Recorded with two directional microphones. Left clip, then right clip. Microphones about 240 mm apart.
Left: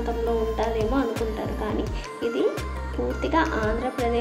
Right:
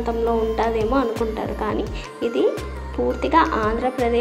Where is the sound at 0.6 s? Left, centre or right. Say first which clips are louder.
Right 5 dB; centre.